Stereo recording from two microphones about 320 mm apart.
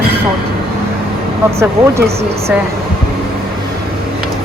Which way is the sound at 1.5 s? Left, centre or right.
Centre.